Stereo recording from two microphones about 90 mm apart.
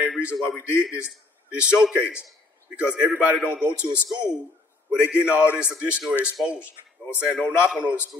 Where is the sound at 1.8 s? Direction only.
10° right (ahead or behind).